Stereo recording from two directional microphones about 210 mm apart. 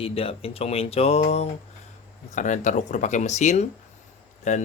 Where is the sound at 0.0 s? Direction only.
25° left (ahead or behind).